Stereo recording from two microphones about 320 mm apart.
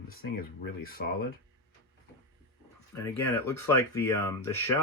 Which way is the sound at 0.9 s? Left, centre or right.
Left.